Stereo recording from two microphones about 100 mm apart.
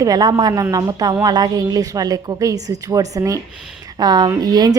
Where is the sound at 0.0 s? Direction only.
40° right (ahead or behind).